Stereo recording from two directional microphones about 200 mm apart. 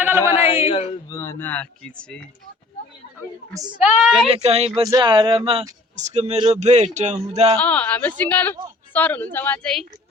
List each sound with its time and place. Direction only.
0.0 s speech: 10° right (ahead or behind)
0.4 s speech: 30° left (ahead or behind)
1.1 s speech: 15° left (ahead or behind)
3.8 s a woman's voice: 5° right (ahead or behind)
4.3 s speech: 30° right (ahead or behind)
4.8 s speech: 20° right (ahead or behind); by 7.5 s 35° right (ahead or behind)
7.6 s speech: 5° left (ahead or behind)